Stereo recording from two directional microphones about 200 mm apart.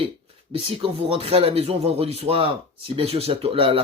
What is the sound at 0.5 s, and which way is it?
Speech, 30° right (ahead or behind).